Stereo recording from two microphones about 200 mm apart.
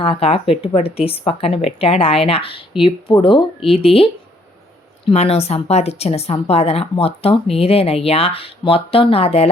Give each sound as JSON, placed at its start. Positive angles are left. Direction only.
{"t": 0.0, "sound": "speech", "side_deg": 30}